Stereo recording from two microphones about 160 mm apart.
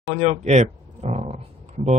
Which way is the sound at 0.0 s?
45° right (ahead or behind).